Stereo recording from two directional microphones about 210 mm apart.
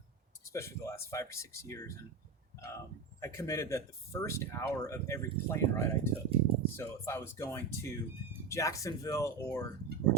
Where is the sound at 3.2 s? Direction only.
15° left (ahead or behind).